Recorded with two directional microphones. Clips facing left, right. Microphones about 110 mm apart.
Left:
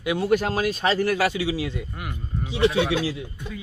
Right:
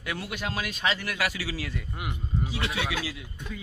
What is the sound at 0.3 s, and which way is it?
A man's voice, 40° left (ahead or behind).